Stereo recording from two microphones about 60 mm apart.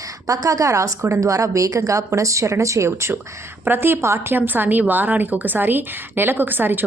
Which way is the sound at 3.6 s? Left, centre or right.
Right.